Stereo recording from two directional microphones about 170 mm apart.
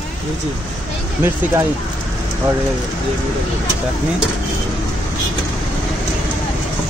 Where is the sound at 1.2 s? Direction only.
15° right (ahead or behind).